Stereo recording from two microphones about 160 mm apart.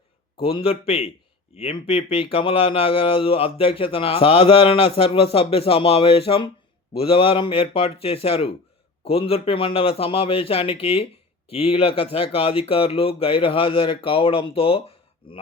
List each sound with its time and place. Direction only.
0.4 s a man's voice: 35° left (ahead or behind)